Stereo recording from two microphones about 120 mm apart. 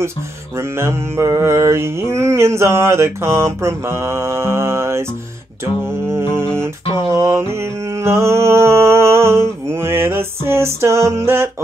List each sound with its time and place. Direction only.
0.6 s mantra: 20° right (ahead or behind)
6.6 s mantra: 25° right (ahead or behind)